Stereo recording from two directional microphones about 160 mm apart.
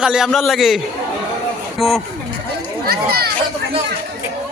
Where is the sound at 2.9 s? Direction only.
75° right (ahead or behind).